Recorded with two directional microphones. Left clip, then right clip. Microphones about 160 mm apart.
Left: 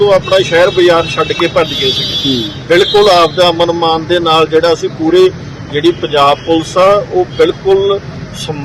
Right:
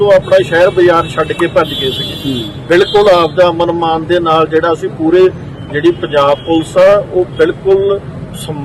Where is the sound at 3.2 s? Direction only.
20° right (ahead or behind).